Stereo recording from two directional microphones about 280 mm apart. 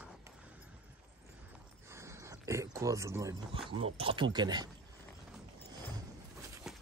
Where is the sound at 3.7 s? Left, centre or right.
Centre.